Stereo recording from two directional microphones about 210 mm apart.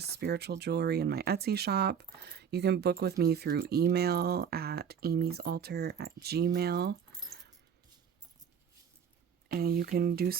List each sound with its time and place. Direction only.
0.0 s speech: 50° right (ahead or behind)
9.5 s speech: 45° right (ahead or behind)